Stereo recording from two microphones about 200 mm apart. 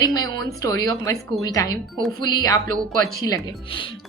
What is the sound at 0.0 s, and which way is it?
A woman's voice, 20° left (ahead or behind).